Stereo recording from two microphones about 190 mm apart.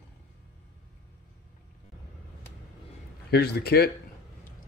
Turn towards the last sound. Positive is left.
turn(degrees=55)  # may be behind; listen again after turning